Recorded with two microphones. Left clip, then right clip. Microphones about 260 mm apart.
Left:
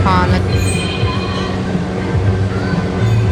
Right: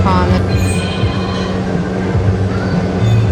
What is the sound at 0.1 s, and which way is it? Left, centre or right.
Music, centre.